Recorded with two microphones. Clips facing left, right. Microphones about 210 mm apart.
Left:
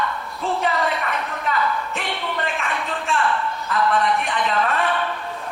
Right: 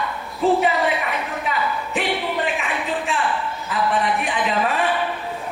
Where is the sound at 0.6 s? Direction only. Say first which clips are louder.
Right 2 dB; 5° right (ahead or behind).